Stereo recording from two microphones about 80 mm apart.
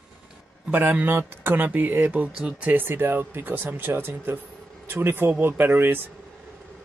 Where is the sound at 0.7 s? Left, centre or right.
Right.